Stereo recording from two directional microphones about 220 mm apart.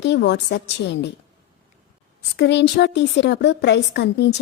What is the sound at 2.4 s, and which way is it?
A woman's voice, 50° left (ahead or behind).